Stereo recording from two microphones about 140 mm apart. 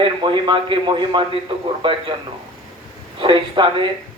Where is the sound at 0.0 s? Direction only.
35° right (ahead or behind).